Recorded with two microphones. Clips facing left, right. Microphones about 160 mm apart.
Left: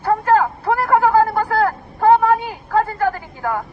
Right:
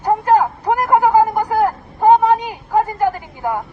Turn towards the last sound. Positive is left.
turn(degrees=-15)  # may be behind; listen again after turning